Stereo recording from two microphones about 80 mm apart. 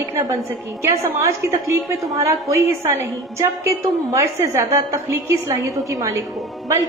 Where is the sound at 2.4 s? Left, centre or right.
Right.